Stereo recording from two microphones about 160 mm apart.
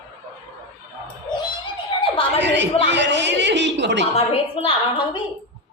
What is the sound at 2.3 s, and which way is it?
Speech, 90° right.